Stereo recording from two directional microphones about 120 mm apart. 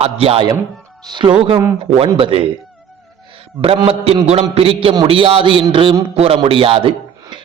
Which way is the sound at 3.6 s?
55° right (ahead or behind).